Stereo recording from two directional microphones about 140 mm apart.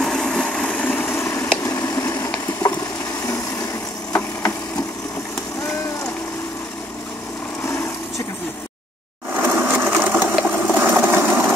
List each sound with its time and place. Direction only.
0.0 s vehicle: 5° left (ahead or behind); by 1.4 s 20° left (ahead or behind)
1.6 s a sound: 20° left (ahead or behind)
9.4 s sewing machine: 10° right (ahead or behind)